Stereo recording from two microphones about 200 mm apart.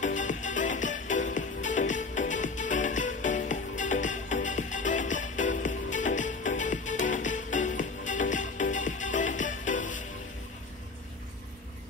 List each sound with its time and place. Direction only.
0.0 s music: 40° left (ahead or behind)